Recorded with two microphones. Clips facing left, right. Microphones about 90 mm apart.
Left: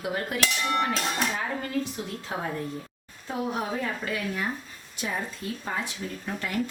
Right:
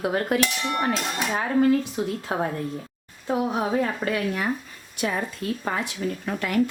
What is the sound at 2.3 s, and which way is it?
Speech, 50° right (ahead or behind).